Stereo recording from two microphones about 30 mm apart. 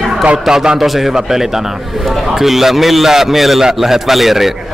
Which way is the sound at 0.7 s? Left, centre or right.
Centre.